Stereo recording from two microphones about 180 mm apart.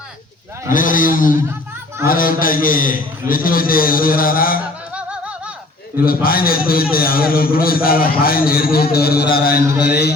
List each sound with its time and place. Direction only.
0.7 s a man's voice: 50° left (ahead or behind)
6.1 s a man's voice: 55° left (ahead or behind)